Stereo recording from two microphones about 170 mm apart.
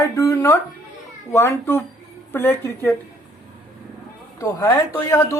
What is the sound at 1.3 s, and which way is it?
Speech, 15° left (ahead or behind).